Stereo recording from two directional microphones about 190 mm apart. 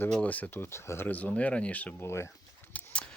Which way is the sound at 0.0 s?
5° left (ahead or behind).